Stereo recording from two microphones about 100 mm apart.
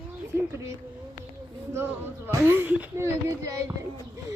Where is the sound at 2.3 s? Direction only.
25° right (ahead or behind).